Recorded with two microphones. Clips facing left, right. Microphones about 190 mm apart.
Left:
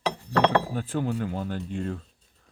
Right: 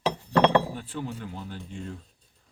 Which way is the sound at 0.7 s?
50° left (ahead or behind).